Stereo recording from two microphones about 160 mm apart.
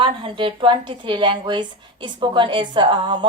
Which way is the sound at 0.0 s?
30° right (ahead or behind).